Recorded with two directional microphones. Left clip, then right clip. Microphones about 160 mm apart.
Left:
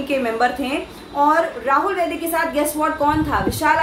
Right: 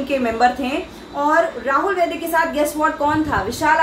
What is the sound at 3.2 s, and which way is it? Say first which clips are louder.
Speech: even; 5° left (ahead or behind).